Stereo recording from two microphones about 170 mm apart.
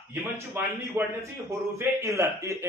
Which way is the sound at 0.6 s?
10° right (ahead or behind).